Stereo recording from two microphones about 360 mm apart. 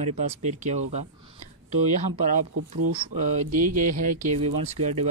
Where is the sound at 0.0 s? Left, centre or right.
Centre.